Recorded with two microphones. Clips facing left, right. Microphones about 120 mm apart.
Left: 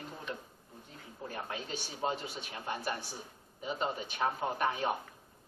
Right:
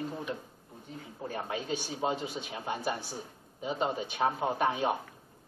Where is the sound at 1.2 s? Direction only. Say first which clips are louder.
Right 5 dB; 10° right (ahead or behind).